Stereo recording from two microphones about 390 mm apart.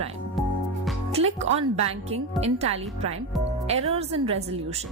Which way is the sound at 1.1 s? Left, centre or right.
Centre.